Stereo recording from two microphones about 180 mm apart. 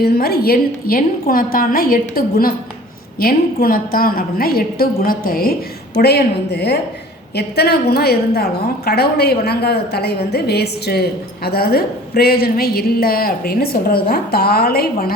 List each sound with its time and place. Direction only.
0.0 s a woman's voice: 60° left (ahead or behind)